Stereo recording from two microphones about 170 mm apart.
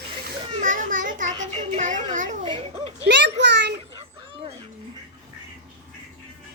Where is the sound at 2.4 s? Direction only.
35° right (ahead or behind).